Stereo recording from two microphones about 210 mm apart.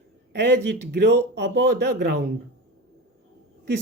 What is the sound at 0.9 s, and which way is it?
Speech, 50° right (ahead or behind).